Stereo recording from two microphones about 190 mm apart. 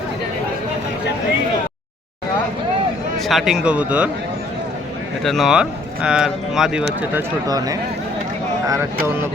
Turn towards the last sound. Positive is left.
turn(degrees=-20)  # may be behind; listen again after turning